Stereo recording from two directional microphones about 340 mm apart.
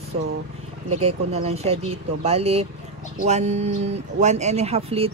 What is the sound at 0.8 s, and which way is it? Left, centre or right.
Speech, right.